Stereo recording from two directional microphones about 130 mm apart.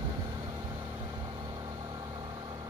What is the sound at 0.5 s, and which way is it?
Vehicle, 30° right (ahead or behind).